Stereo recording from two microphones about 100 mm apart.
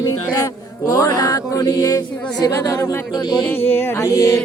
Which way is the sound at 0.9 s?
40° left (ahead or behind).